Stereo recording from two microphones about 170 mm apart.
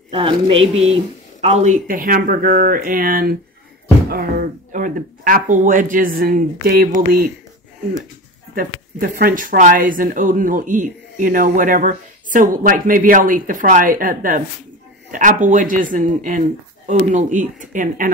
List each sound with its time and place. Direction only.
0.1 s speech: 35° right (ahead or behind); by 7.2 s 60° right (ahead or behind)
8.5 s speech: 55° right (ahead or behind)